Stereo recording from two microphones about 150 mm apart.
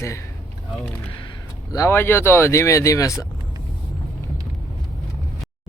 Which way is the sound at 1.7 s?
20° left (ahead or behind).